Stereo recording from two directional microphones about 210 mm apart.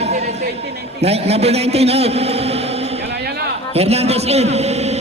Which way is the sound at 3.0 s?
50° right (ahead or behind).